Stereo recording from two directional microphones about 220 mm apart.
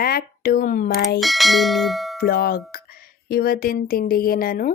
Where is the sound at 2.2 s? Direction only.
45° left (ahead or behind).